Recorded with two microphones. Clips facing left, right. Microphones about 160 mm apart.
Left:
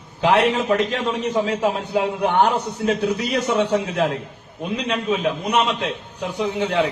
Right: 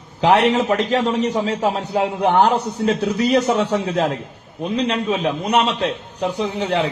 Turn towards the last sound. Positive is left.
turn(degrees=-35)  # may be behind; listen again after turning